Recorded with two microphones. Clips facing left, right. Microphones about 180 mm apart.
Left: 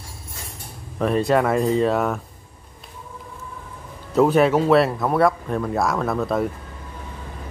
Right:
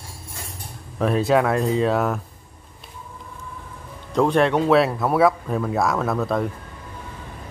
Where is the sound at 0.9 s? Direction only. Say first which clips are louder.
Even; centre (ahead or behind).